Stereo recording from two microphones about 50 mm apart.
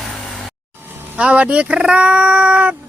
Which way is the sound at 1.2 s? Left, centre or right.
Right.